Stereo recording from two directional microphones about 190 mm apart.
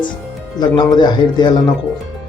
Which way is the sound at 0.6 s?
20° left (ahead or behind).